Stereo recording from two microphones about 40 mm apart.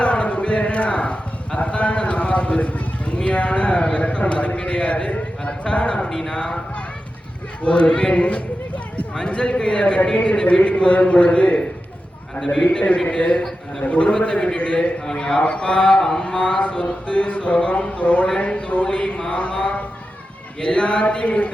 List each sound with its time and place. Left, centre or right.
0.0 s a sound: left
6.1 s a sound: centre
6.3 s speech: left
7.6 s speech: left
15.0 s a man's voice: centre
15.4 s speech: left